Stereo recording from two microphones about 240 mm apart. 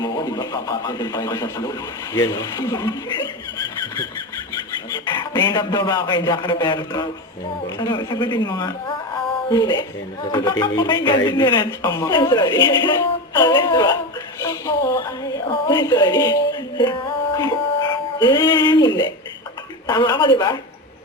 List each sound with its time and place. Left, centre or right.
0.0 s speech: centre
5.0 s speech: centre